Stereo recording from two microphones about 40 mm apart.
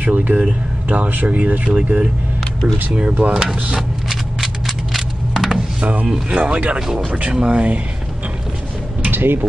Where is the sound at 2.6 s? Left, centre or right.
Right.